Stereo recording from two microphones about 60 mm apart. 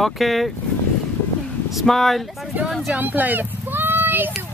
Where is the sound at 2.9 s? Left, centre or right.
Right.